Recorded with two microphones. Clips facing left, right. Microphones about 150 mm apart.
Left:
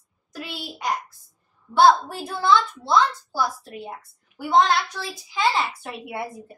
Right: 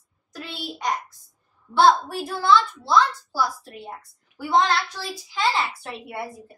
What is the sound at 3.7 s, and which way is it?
A woman's voice, 10° left (ahead or behind).